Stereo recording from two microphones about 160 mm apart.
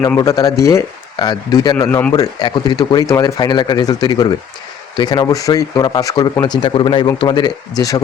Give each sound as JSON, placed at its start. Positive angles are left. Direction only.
{"t": 0.2, "sound": "speech", "side_deg": 20}
{"t": 1.8, "sound": "a man's voice", "side_deg": 10}
{"t": 2.1, "sound": "speech", "side_deg": 25}